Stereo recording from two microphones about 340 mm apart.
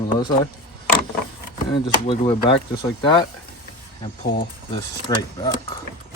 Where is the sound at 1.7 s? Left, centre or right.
Centre.